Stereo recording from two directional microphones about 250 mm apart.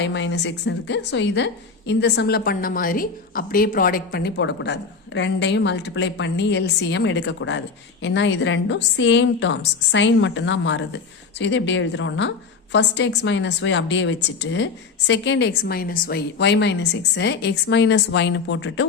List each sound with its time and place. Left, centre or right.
0.0 s a woman's voice: left